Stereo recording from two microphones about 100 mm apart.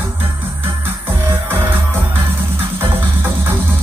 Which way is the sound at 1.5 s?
20° right (ahead or behind).